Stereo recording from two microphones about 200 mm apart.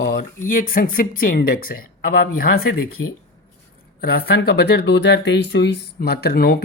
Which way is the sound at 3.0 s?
80° left.